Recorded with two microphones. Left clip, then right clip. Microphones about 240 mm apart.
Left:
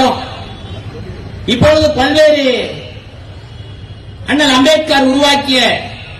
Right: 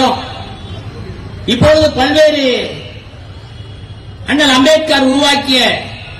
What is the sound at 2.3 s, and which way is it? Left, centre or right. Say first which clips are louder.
Speech: left 2 dB; left.